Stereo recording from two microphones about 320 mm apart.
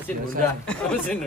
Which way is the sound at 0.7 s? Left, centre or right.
Centre.